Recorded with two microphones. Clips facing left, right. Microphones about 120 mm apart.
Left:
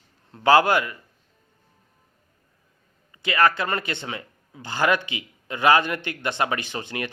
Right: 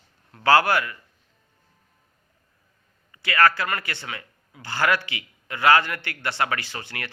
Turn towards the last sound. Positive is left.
turn(degrees=20)  # may be behind; listen again after turning